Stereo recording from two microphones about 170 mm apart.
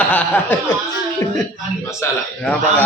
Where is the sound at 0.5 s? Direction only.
10° left (ahead or behind).